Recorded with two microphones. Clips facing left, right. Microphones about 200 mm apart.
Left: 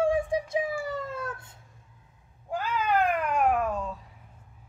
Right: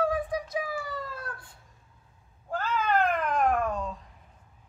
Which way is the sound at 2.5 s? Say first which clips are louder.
Even; 10° left (ahead or behind).